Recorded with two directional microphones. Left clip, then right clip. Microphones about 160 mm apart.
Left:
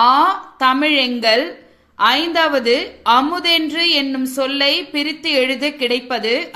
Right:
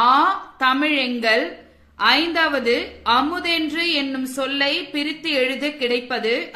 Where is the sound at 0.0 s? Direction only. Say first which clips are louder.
Left 3 dB; 35° left (ahead or behind).